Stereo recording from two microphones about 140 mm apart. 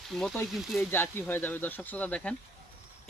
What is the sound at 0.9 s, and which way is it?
Speech, 15° left (ahead or behind).